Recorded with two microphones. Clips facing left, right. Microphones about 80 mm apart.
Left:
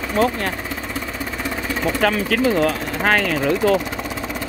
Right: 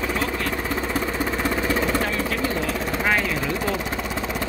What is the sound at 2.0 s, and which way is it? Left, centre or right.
Speech, left.